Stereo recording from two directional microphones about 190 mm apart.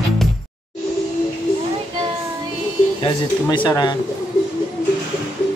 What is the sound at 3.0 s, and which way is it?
Speech, 25° left (ahead or behind).